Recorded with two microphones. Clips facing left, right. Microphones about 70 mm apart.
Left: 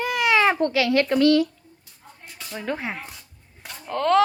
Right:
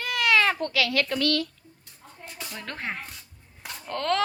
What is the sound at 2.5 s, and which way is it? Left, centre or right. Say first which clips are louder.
Speech: left 6 dB; centre.